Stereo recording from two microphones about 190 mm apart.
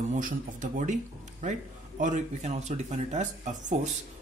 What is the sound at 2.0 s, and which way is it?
Speech, 40° right (ahead or behind).